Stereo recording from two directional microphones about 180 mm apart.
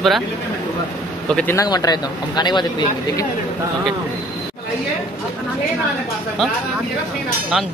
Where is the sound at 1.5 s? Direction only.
20° left (ahead or behind).